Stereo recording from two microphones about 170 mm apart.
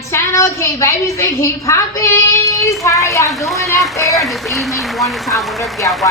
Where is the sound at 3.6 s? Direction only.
20° left (ahead or behind).